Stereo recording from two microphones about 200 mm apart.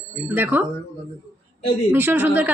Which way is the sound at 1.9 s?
10° right (ahead or behind).